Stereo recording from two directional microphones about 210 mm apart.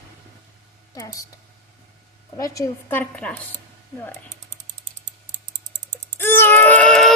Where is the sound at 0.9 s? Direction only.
15° left (ahead or behind).